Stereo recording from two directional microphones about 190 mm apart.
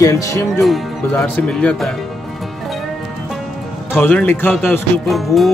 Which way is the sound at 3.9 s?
10° left (ahead or behind).